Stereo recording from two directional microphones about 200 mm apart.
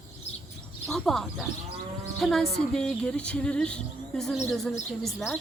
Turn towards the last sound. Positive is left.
turn(degrees=0)  # may be behind; listen again after turning